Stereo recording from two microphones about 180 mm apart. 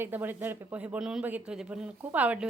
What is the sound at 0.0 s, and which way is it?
A woman's voice, 10° right (ahead or behind).